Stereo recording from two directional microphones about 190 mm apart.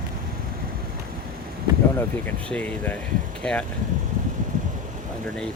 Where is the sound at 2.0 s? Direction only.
10° left (ahead or behind).